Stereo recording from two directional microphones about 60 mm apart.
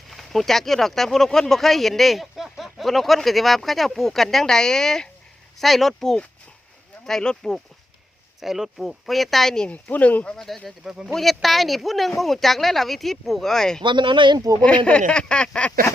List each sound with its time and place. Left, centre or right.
0.1 s speech: centre
8.4 s speech: centre
9.6 s speech: left
10.7 s speech: centre
14.3 s speech: right
14.6 s speech: centre